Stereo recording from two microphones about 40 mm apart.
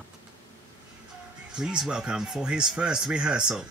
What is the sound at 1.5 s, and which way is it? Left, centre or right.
Speech, centre.